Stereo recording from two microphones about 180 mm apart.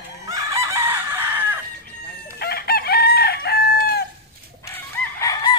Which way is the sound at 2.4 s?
60° left (ahead or behind).